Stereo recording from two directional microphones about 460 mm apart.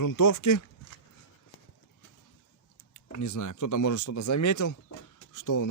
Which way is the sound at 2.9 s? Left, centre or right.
Left.